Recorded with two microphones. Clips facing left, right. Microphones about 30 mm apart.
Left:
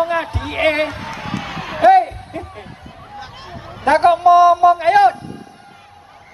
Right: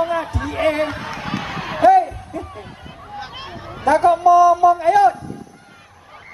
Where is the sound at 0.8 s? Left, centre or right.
Centre.